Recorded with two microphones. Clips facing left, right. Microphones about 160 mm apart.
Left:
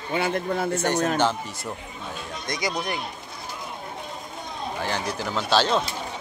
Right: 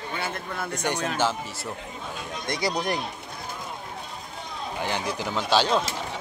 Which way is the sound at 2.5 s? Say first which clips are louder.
Right 2 dB; 35° right (ahead or behind).